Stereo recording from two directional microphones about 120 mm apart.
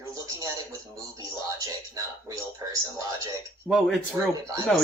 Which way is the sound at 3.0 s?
30° right (ahead or behind).